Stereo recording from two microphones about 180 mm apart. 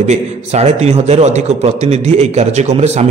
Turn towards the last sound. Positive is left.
turn(degrees=-40)  # may be behind; listen again after turning